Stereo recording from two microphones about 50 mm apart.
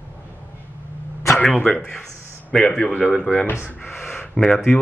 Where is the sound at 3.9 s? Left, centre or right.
Left.